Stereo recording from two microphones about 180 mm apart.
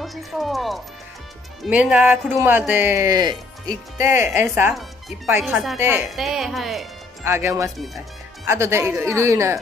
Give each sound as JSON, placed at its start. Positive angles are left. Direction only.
{"t": 0.0, "sound": "speech", "side_deg": 0}
{"t": 5.4, "sound": "speech", "side_deg": 0}
{"t": 5.8, "sound": "speech", "side_deg": -10}
{"t": 6.0, "sound": "speech", "side_deg": 0}
{"t": 7.2, "sound": "speech", "side_deg": -15}
{"t": 7.7, "sound": "speech", "side_deg": 0}
{"t": 8.5, "sound": "speech", "side_deg": -15}